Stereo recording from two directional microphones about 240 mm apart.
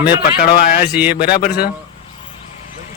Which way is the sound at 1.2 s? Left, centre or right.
Left.